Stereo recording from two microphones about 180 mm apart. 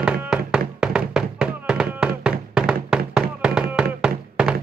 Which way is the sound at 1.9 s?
5° right (ahead or behind).